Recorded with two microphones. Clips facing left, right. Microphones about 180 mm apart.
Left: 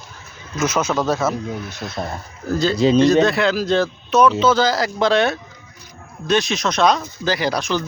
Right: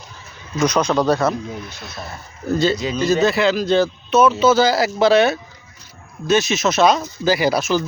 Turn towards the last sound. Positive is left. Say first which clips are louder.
# right 3 dB
turn(degrees=-5)  # may be behind; listen again after turning